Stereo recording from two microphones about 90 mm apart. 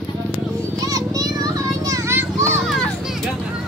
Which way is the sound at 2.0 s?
30° right (ahead or behind).